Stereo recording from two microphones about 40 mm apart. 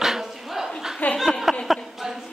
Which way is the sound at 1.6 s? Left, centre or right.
Centre.